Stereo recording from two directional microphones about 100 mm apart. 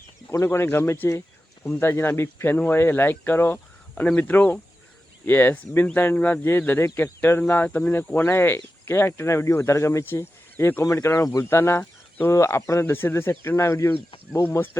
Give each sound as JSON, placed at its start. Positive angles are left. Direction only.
{"t": 0.3, "sound": "speech", "side_deg": 25}
{"t": 11.8, "sound": "a sound", "side_deg": 15}
{"t": 12.3, "sound": "speech", "side_deg": 30}